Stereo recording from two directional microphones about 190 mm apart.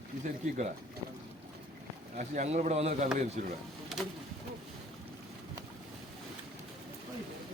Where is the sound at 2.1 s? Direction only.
40° right (ahead or behind).